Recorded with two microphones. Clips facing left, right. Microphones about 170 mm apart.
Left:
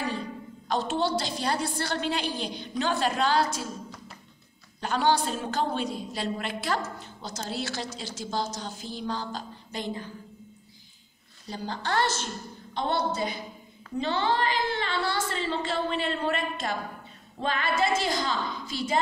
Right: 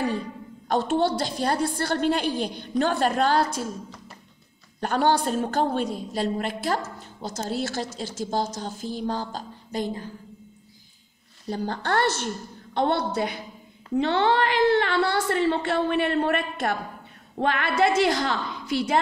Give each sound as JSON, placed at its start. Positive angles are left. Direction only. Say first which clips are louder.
{"t": 0.7, "sound": "a woman's voice", "louder": "right 5 dB", "side_deg": -55}
{"t": 4.7, "sound": "a woman's voice", "louder": "right 3 dB", "side_deg": -50}
{"t": 11.4, "sound": "speech", "louder": "right 5 dB", "side_deg": -50}